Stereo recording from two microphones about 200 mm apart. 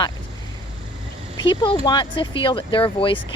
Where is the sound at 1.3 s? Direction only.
20° left (ahead or behind).